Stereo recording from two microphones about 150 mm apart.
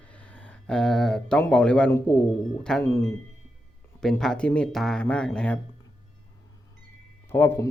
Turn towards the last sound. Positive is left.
turn(degrees=15)  # may be behind; listen again after turning